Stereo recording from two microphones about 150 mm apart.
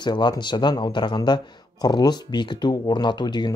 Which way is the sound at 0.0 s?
30° left (ahead or behind).